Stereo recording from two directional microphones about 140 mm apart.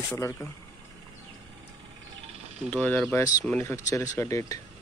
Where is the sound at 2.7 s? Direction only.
10° left (ahead or behind).